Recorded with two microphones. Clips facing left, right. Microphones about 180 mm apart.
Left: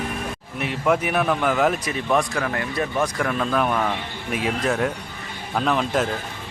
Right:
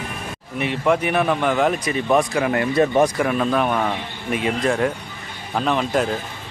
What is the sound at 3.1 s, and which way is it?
Speech, 5° right (ahead or behind).